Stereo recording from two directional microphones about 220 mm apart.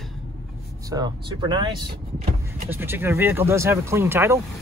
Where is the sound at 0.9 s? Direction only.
15° right (ahead or behind).